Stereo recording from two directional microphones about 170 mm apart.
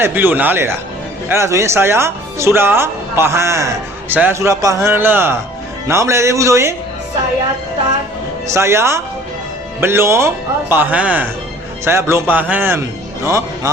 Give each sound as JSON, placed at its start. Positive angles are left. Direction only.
{"t": 0.0, "sound": "speech", "side_deg": -10}
{"t": 8.4, "sound": "speech", "side_deg": -15}